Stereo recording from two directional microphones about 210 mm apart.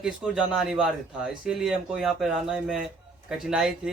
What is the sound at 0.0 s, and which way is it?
Speech, 5° right (ahead or behind).